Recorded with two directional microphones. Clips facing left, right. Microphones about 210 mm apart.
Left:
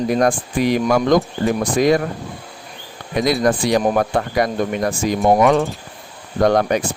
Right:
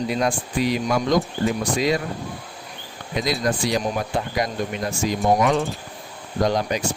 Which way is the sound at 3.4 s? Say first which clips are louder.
Left 6 dB; 55° left (ahead or behind).